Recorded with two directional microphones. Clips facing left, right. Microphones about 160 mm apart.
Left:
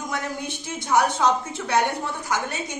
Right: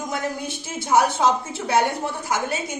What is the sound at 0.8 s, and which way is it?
Speech, 25° right (ahead or behind).